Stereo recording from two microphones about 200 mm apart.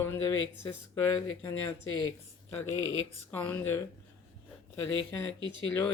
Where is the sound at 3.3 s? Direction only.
10° left (ahead or behind).